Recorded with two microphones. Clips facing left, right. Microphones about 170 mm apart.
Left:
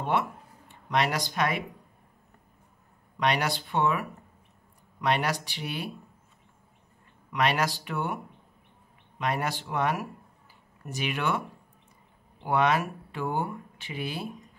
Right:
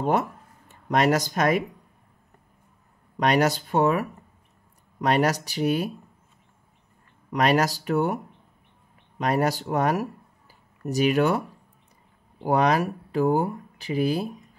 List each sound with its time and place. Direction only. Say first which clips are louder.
0.0 s speech: right 4 dB; 40° right (ahead or behind)
3.2 s speech: right 6 dB; 40° right (ahead or behind)
7.2 s speech: right 5 dB; 40° right (ahead or behind)
9.2 s speech: right 7 dB; 40° right (ahead or behind)
12.4 s speech: right 4 dB; 40° right (ahead or behind)